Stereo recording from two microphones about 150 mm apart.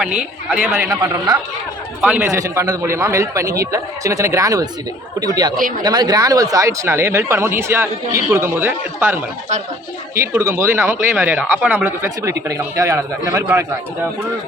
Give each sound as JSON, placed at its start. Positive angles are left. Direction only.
{"t": 0.0, "sound": "speech", "side_deg": -10}
{"t": 2.0, "sound": "speech", "side_deg": -10}
{"t": 2.4, "sound": "a man's voice", "side_deg": -20}
{"t": 5.5, "sound": "speech", "side_deg": -65}
{"t": 5.8, "sound": "speech", "side_deg": -25}
{"t": 10.3, "sound": "speech", "side_deg": -15}